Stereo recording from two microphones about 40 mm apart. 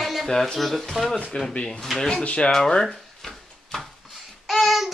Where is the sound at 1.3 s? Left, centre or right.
Left.